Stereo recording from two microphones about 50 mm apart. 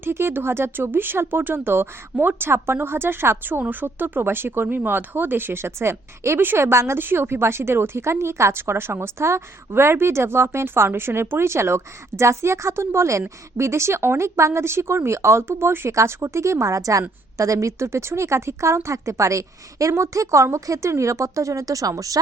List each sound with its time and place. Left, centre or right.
0.0 s a woman's voice: right
7.0 s a woman's voice: right